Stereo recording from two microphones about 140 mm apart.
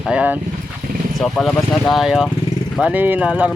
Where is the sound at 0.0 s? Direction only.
10° right (ahead or behind).